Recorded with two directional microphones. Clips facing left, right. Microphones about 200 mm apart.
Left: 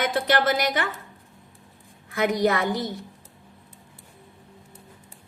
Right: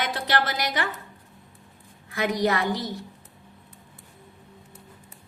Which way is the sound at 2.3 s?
50° left (ahead or behind).